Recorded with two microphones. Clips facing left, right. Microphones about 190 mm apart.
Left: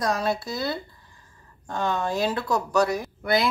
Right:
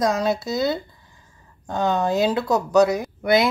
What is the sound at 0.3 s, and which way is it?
Speech, 20° right (ahead or behind).